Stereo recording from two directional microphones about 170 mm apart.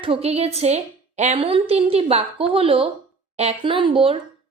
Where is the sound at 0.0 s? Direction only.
35° right (ahead or behind).